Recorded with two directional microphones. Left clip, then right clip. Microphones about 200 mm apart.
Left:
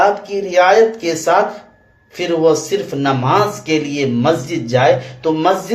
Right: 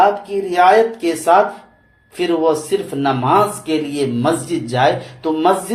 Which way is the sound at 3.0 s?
20° right (ahead or behind).